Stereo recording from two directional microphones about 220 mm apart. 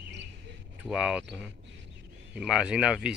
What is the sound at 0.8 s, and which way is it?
Speech, 5° right (ahead or behind).